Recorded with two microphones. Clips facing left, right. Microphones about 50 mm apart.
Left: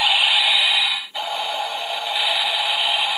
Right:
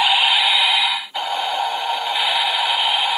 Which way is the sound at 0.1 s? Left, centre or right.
Right.